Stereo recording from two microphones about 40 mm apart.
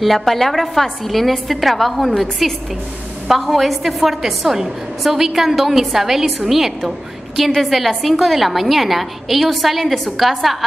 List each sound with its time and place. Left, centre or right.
0.0 s a woman's voice: centre
8.0 s a woman's voice: centre